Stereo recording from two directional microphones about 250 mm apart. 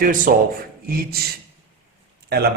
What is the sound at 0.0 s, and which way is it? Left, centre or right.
A man's voice, right.